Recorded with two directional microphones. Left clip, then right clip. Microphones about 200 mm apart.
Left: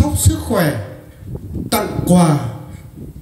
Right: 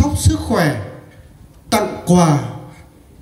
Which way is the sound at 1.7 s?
55° right (ahead or behind).